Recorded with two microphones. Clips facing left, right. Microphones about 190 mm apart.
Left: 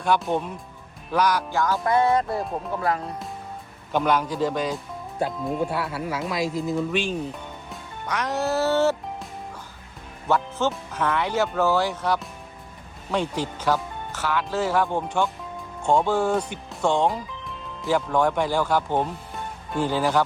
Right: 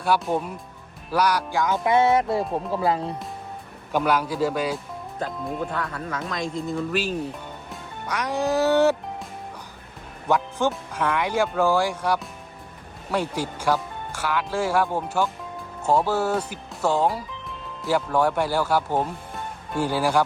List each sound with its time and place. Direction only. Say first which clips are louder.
0.0 s speech: even; 5° right (ahead or behind)
1.8 s music: right 2 dB; 20° right (ahead or behind)
2.4 s speech: right 3 dB; centre (ahead or behind)
3.9 s speech: even; 5° right (ahead or behind)
5.5 s speech: left 3 dB; 10° left (ahead or behind); by 9.0 s 15° right (ahead or behind)
10.2 s music: right 1 dB; 15° right (ahead or behind)
10.7 s speech: even; 10° right (ahead or behind)